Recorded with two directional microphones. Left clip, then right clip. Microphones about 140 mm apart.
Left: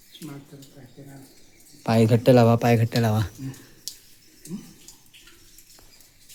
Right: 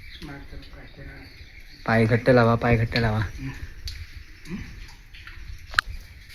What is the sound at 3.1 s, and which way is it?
Speech, 35° left (ahead or behind).